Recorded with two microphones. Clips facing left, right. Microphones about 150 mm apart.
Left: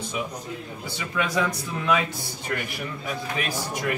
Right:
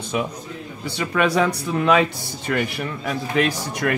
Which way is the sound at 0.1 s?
65° right (ahead or behind).